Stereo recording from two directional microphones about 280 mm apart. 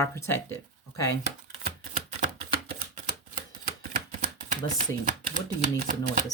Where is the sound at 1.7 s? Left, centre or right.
Right.